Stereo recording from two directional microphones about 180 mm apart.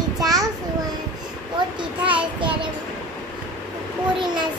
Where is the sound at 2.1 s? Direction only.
30° right (ahead or behind).